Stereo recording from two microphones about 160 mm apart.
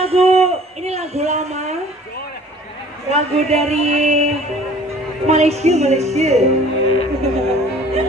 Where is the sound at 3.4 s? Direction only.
45° right (ahead or behind).